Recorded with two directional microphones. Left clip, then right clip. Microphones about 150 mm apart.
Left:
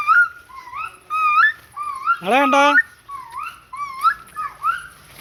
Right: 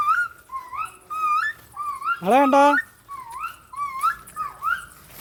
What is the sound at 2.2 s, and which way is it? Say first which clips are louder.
Speech: even; 20° right (ahead or behind).